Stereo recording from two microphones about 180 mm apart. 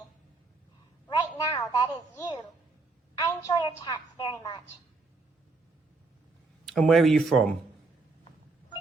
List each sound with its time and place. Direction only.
1.0 s a sound: 20° left (ahead or behind)
3.2 s a woman's voice: 20° left (ahead or behind)
6.7 s speech: centre (ahead or behind)